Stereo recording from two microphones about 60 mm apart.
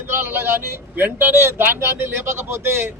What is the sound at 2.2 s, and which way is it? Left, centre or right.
Speech, right.